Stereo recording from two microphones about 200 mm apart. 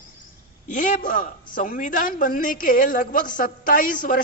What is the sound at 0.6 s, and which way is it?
A man's voice, 40° left (ahead or behind).